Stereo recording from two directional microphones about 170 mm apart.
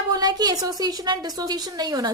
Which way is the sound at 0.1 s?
25° right (ahead or behind).